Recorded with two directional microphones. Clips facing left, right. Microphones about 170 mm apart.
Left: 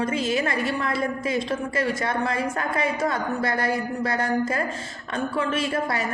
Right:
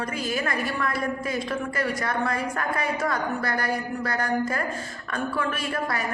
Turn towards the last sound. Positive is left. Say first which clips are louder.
# left 4 dB
turn(degrees=25)  # may be behind; listen again after turning